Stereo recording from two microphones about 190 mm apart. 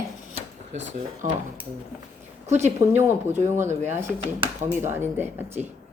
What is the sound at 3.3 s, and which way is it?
Speech, 10° right (ahead or behind).